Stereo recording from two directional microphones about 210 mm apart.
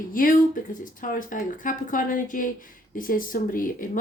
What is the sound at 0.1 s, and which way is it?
Speech, 40° left (ahead or behind).